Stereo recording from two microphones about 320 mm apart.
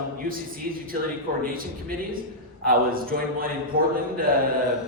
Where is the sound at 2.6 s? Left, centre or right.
Right.